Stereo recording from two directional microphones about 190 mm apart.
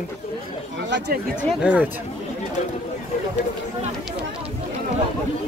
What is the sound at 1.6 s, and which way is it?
Speech, 5° right (ahead or behind).